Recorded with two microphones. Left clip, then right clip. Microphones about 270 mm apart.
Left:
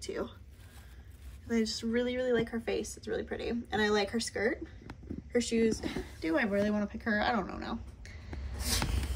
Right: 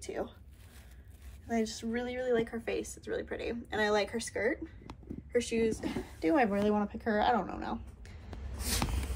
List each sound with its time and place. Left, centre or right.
0.0 s speech: centre
1.5 s speech: centre